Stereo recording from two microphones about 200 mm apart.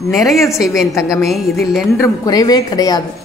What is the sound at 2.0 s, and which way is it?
A woman's voice, 20° left (ahead or behind).